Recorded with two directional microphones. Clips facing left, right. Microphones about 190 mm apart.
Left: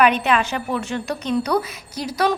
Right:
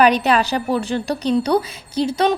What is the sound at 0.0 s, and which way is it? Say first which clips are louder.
A woman's voice: right 3 dB; 35° right (ahead or behind).